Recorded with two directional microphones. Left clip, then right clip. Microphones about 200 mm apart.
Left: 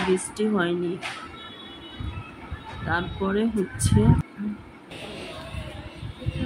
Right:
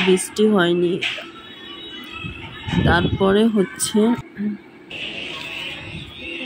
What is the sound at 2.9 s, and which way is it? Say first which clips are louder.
Speech: right 9 dB; 30° right (ahead or behind).